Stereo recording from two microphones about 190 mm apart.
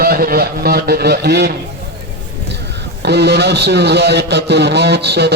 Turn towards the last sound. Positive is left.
turn(degrees=-60)  # may be behind; listen again after turning